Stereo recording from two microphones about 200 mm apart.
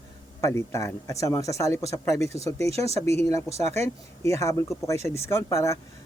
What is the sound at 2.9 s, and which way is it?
Speech, 35° right (ahead or behind).